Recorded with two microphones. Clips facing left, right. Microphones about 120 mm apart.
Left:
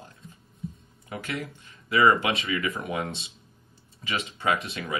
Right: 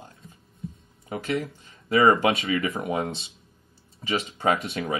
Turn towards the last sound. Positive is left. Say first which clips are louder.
# right 3 dB
turn(degrees=-25)  # may be behind; listen again after turning